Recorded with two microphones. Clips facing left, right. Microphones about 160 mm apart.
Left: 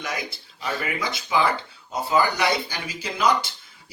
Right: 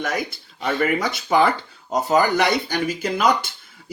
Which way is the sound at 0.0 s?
50° right (ahead or behind).